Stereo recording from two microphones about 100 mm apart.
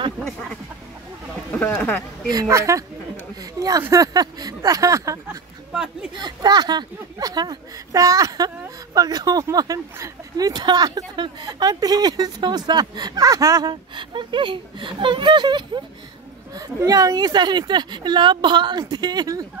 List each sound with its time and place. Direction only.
1.5 s speech: 10° left (ahead or behind)
2.3 s speech: 30° right (ahead or behind)
5.7 s speech: 5° right (ahead or behind)
6.1 s speech: 45° right (ahead or behind)
16.5 s speech: 35° right (ahead or behind)